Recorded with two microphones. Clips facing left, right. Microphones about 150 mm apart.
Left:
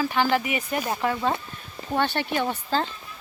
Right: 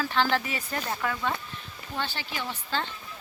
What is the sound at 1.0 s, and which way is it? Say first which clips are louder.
Speech: left 6 dB; 30° left (ahead or behind).